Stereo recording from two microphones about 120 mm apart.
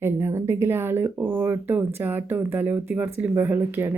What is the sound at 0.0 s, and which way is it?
Speech, 20° right (ahead or behind).